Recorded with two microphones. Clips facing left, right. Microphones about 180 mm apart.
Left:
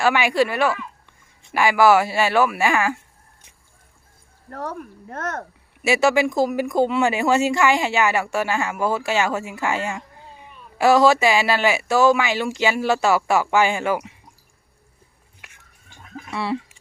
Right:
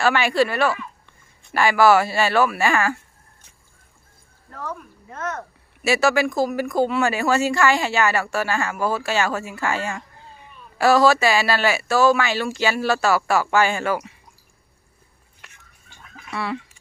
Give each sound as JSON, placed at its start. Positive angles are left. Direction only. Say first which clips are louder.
{"t": 0.0, "sound": "speech", "louder": "even", "side_deg": 15}
{"t": 4.5, "sound": "speech", "louder": "left 3 dB", "side_deg": 60}
{"t": 5.8, "sound": "speech", "louder": "left 1 dB", "side_deg": 20}
{"t": 16.3, "sound": "speech", "louder": "left 2 dB", "side_deg": 30}